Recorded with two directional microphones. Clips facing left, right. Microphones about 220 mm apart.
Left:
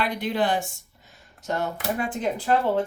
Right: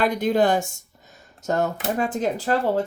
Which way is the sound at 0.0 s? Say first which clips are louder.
Right 6 dB; 45° right (ahead or behind).